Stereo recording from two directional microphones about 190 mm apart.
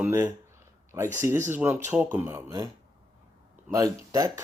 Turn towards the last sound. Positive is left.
turn(degrees=-20)  # may be behind; listen again after turning